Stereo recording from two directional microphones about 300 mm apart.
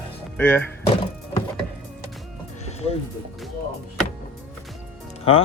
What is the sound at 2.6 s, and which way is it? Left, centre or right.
Music, left.